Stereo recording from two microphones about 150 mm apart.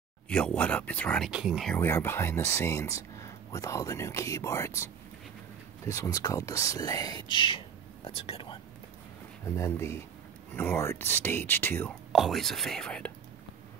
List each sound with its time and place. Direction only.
0.3 s speech: 5° left (ahead or behind)
1.3 s speech: centre (ahead or behind)
1.8 s speech: 15° left (ahead or behind)
5.9 s speech: 20° left (ahead or behind); by 8.5 s 35° left (ahead or behind)
9.6 s speech: 15° left (ahead or behind)
12.1 s speech: centre (ahead or behind)